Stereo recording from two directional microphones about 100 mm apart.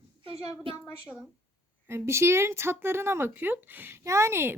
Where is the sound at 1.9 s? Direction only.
25° right (ahead or behind).